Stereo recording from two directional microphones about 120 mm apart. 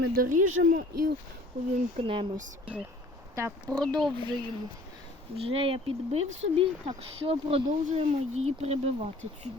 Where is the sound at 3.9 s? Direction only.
40° right (ahead or behind).